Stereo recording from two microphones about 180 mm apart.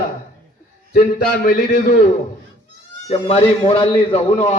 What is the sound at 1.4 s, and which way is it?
Speech, 50° left (ahead or behind).